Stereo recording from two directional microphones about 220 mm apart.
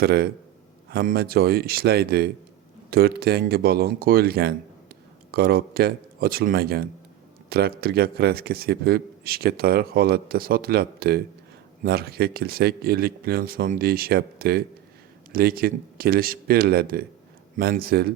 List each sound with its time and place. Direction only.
0.0 s a man's voice: 50° right (ahead or behind)